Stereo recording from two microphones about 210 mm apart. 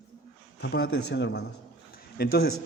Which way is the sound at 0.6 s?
55° left (ahead or behind).